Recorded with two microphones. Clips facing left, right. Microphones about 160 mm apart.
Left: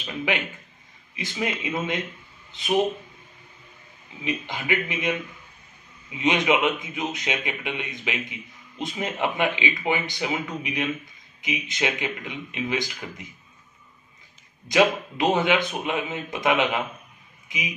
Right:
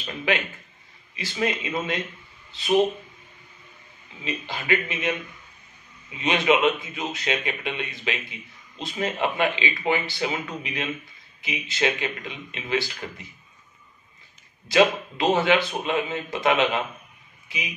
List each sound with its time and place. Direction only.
0.0 s a man's voice: 15° left (ahead or behind)
4.2 s a man's voice: 15° left (ahead or behind)
6.1 s a man's voice: 15° left (ahead or behind)
14.7 s a man's voice: 15° left (ahead or behind)